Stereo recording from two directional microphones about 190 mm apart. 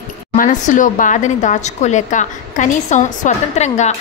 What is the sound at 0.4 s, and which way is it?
A woman's voice, 40° left (ahead or behind).